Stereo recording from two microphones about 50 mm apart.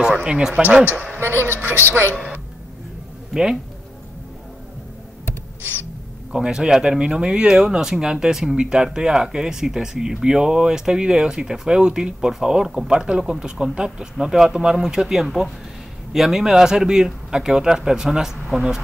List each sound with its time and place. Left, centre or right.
0.0 s speech: centre
1.2 s a woman's voice: right
6.3 s speech: centre